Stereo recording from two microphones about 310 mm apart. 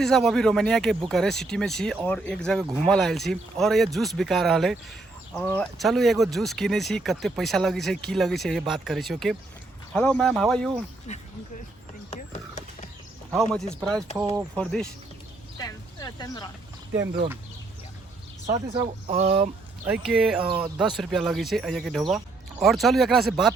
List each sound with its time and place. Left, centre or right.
0.0 s speech: centre
11.1 s speech: left
12.1 s a sound: left
14.2 s speech: centre
14.5 s speech: centre
15.5 s a sound: centre
18.4 s speech: centre
19.8 s speech: centre